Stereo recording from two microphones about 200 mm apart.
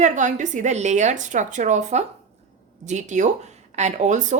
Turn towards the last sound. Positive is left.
turn(degrees=-35)  # may be behind; listen again after turning